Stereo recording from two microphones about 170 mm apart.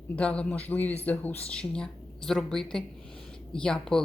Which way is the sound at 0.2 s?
5° left (ahead or behind).